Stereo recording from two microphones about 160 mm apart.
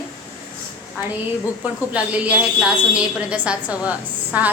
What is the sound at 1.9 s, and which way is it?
A woman's voice, 10° right (ahead or behind).